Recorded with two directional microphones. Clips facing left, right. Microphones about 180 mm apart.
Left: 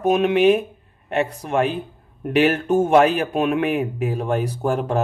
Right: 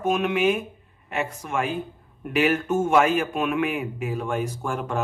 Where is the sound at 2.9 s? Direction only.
35° left (ahead or behind).